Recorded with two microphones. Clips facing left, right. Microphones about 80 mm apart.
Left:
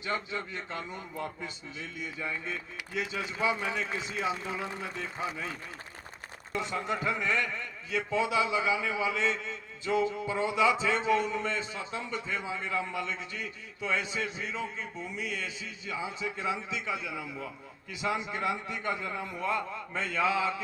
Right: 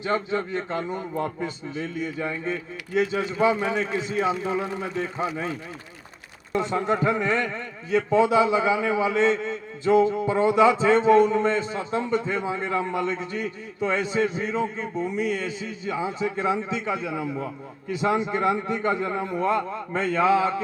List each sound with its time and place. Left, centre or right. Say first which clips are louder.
0.0 s a man's voice: right 9 dB; right
6.6 s a man's voice: right 9 dB; right